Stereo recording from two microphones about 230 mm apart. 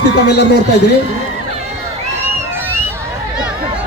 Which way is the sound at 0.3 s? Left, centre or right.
Left.